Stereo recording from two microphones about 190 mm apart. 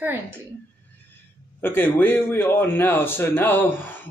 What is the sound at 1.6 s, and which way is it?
A man's voice, 10° left (ahead or behind).